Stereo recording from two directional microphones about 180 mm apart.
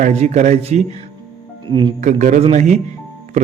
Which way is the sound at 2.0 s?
40° right (ahead or behind).